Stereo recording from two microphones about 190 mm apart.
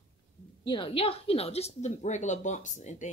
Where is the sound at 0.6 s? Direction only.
25° left (ahead or behind).